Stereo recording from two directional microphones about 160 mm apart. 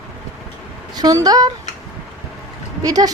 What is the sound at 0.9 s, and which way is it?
Speech, 25° right (ahead or behind).